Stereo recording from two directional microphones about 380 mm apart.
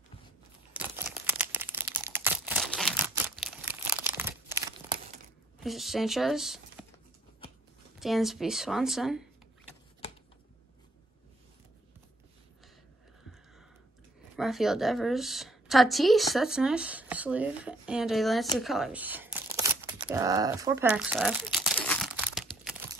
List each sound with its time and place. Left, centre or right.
0.7 s crumpling: centre
5.6 s speech: centre
8.0 s a woman's voice: centre
14.3 s a woman's voice: centre
18.6 s groan: centre